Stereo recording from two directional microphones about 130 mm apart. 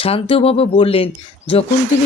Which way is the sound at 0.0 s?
45° left (ahead or behind).